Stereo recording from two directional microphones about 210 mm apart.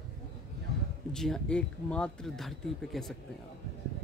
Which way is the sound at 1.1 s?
Centre (ahead or behind).